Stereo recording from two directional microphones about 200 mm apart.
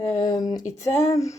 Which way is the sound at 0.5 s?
15° left (ahead or behind).